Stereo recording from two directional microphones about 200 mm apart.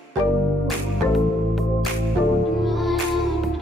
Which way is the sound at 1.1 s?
Centre (ahead or behind).